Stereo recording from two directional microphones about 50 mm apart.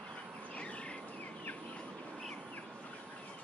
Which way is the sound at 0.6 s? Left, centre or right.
Left.